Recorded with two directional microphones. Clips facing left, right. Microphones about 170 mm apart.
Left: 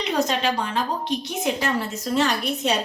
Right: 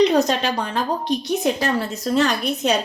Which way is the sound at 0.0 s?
40° right (ahead or behind).